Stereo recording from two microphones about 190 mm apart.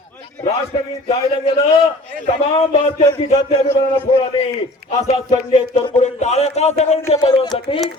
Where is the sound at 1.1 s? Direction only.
30° left (ahead or behind).